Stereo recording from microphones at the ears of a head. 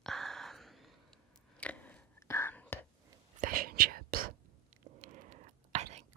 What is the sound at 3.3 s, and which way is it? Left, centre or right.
Whispering, right.